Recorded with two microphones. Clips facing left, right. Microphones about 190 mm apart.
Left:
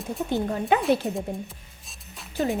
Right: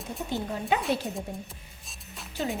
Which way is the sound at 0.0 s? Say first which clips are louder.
Left 6 dB; centre (ahead or behind).